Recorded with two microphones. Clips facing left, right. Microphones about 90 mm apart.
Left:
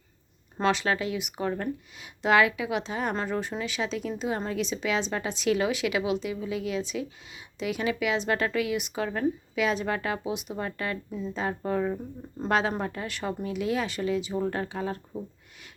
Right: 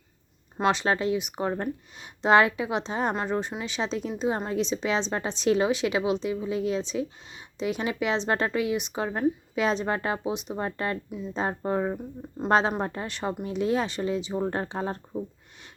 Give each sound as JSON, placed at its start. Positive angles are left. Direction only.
{"t": 0.6, "sound": "a woman's voice", "side_deg": -20}